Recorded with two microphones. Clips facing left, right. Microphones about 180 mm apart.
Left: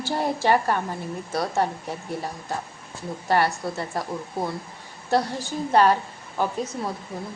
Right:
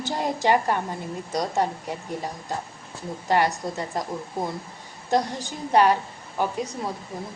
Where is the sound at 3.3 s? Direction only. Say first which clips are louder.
Even; 15° right (ahead or behind).